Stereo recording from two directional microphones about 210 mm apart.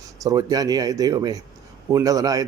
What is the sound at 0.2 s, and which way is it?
A man's voice, 15° right (ahead or behind).